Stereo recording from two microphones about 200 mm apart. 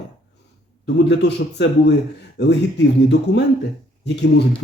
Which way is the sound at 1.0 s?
60° left (ahead or behind).